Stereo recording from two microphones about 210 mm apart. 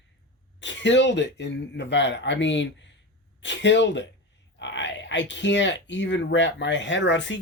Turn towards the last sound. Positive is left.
turn(degrees=60)  # may be behind; listen again after turning